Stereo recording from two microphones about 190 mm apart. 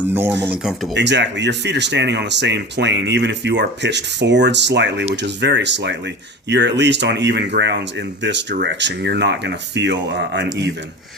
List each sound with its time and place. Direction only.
0.1 s speech: 10° right (ahead or behind)
0.9 s speech: 70° right (ahead or behind)